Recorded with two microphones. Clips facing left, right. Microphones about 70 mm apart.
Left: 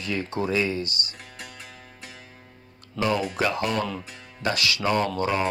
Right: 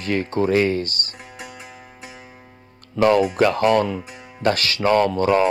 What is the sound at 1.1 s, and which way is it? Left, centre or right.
Music, centre.